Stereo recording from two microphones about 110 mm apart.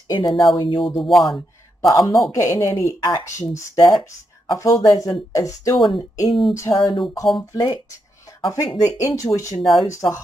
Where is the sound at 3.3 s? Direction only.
30° left (ahead or behind).